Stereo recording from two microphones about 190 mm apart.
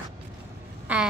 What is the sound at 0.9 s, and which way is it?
Speech, 5° right (ahead or behind).